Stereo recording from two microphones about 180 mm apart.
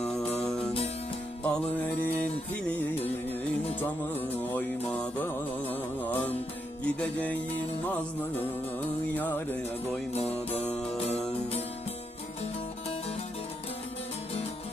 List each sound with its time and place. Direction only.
0.0 s music: 5° left (ahead or behind)
3.8 s music: 10° left (ahead or behind)
10.2 s music: 35° left (ahead or behind)
10.7 s music: 5° left (ahead or behind)